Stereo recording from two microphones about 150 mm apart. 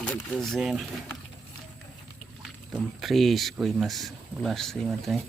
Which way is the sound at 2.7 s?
Centre (ahead or behind).